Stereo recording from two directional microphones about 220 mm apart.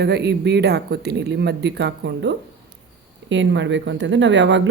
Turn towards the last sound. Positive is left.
turn(degrees=-55)  # may be behind; listen again after turning